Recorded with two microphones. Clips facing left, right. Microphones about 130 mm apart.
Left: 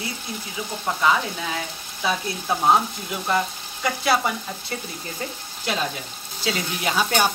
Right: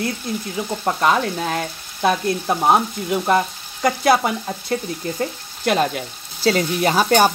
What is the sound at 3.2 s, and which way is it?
Frying, 50° right (ahead or behind).